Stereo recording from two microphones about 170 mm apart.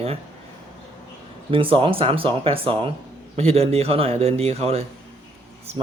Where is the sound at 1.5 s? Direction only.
30° right (ahead or behind).